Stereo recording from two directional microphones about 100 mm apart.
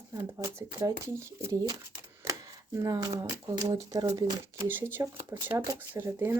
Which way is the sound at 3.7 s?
35° right (ahead or behind).